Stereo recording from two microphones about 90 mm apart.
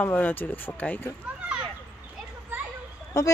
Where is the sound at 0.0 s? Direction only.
20° left (ahead or behind).